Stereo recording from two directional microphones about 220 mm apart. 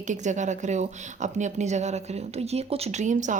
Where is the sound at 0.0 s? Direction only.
35° right (ahead or behind).